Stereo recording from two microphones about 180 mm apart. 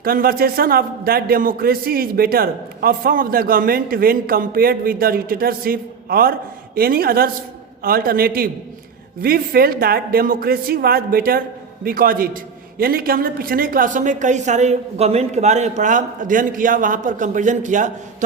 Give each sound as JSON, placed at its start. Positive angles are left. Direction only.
{"t": 0.0, "sound": "a man's voice", "side_deg": -55}